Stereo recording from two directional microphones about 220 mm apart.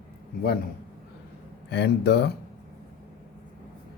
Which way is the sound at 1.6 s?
50° left (ahead or behind).